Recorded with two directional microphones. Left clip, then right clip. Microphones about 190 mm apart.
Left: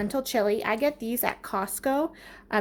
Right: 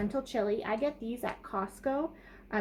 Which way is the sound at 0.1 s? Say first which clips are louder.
Left 9 dB; 45° left (ahead or behind).